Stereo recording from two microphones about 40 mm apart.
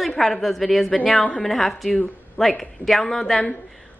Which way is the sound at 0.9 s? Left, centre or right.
Left.